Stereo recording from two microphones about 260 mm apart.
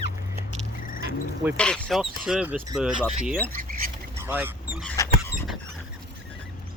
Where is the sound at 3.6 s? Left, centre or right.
Right.